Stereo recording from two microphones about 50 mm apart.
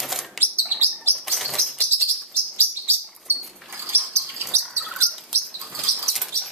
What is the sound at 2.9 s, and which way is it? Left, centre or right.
Chirp, right.